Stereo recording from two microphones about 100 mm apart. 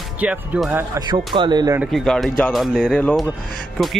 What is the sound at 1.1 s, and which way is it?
Speech, 55° right (ahead or behind).